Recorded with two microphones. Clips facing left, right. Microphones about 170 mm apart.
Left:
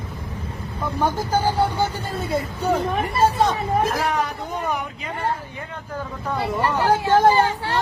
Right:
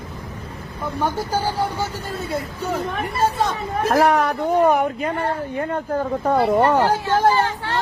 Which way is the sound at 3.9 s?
65° right (ahead or behind).